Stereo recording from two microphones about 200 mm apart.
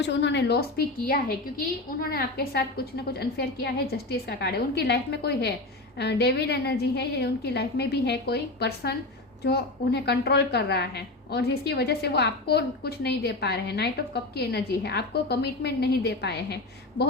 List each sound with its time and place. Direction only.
0.0 s a woman's voice: 60° left (ahead or behind)